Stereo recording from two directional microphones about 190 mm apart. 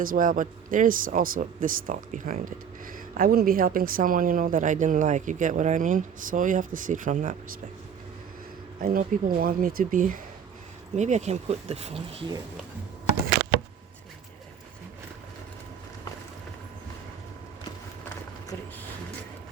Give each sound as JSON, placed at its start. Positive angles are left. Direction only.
{"t": 0.0, "sound": "speech", "side_deg": -45}
{"t": 8.8, "sound": "speech", "side_deg": -50}
{"t": 13.2, "sound": "a sound", "side_deg": -55}